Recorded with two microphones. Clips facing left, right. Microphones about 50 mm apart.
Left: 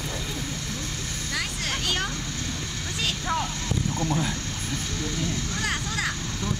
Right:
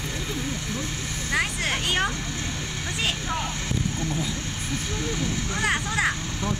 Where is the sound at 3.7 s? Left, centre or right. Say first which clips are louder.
Left 1 dB; left.